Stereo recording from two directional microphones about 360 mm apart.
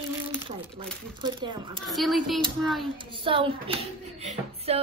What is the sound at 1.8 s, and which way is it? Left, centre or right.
Speech, centre.